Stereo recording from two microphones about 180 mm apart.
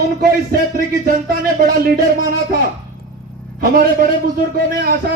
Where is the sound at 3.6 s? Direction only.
55° right (ahead or behind).